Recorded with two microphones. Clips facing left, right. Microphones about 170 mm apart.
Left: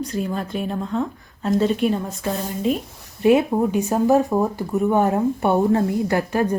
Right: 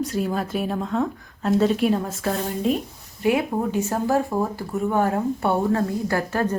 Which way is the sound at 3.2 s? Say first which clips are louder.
Left 5 dB; 20° left (ahead or behind).